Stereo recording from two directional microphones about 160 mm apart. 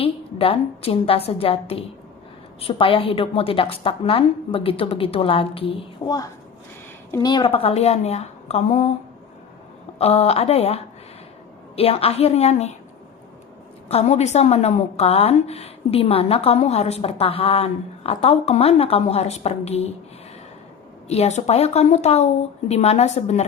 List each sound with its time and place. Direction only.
0.0 s a woman's voice: 35° left (ahead or behind)
6.1 s a woman's voice: 25° left (ahead or behind); by 8.9 s 40° left (ahead or behind)
10.0 s a woman's voice: 40° left (ahead or behind)
13.8 s a woman's voice: 40° left (ahead or behind)
21.1 s a woman's voice: 45° left (ahead or behind)